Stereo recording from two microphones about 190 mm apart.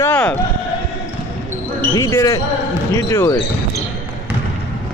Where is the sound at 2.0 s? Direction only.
15° left (ahead or behind).